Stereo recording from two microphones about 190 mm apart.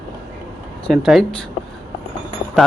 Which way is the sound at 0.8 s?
Centre (ahead or behind).